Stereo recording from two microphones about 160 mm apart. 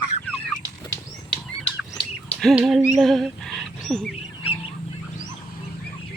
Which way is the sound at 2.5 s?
Centre (ahead or behind).